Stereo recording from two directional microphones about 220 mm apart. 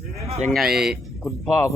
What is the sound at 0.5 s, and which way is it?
Speech, centre (ahead or behind).